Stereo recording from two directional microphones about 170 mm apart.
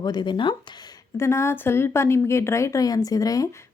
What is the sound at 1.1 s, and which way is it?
Speech, 15° left (ahead or behind).